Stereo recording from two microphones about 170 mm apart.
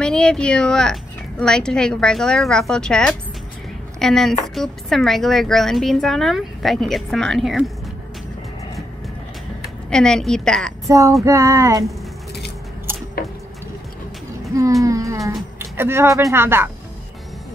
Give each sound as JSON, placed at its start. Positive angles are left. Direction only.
{"t": 0.0, "sound": "a woman's voice", "side_deg": 5}
{"t": 9.8, "sound": "a woman's voice", "side_deg": 5}
{"t": 10.9, "sound": "speech", "side_deg": -20}
{"t": 14.6, "sound": "a sound", "side_deg": -20}
{"t": 15.6, "sound": "speech", "side_deg": -15}